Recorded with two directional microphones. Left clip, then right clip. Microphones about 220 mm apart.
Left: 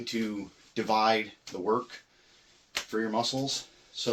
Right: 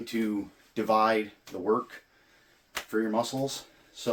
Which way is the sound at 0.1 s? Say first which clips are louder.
Right 3 dB; 15° right (ahead or behind).